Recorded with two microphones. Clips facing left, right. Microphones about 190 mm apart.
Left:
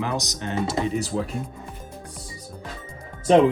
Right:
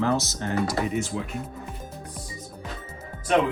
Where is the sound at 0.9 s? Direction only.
35° left (ahead or behind).